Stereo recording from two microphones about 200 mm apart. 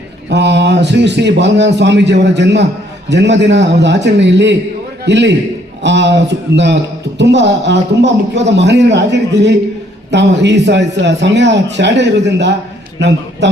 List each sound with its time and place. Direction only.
0.3 s a man's voice: 60° right (ahead or behind)
7.2 s a man's voice: 60° right (ahead or behind)